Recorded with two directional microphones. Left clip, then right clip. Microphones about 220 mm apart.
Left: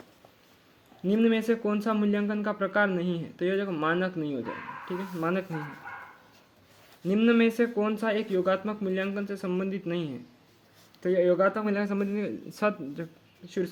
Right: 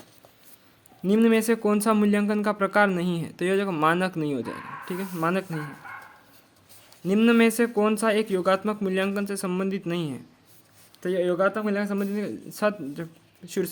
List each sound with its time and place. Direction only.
1.0 s speech: 20° right (ahead or behind)
7.0 s speech: 20° right (ahead or behind)